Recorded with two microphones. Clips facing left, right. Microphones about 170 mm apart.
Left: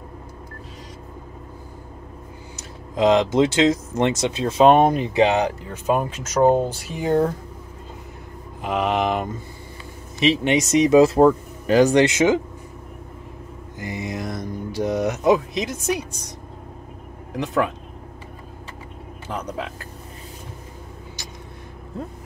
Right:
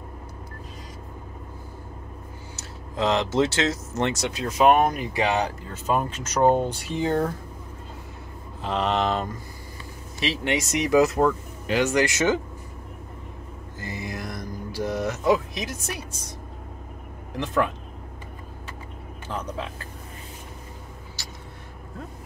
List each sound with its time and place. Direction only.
2.5 s speech: 15° left (ahead or behind)
8.6 s speech: 10° left (ahead or behind); by 12.1 s 35° left (ahead or behind)
13.7 s speech: 20° left (ahead or behind)
19.2 s speech: 15° left (ahead or behind)
21.2 s vehicle: 15° left (ahead or behind)